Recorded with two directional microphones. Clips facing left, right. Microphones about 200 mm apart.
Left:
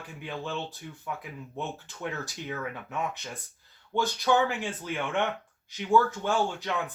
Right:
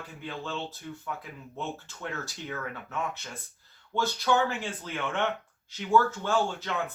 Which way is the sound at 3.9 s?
15° left (ahead or behind).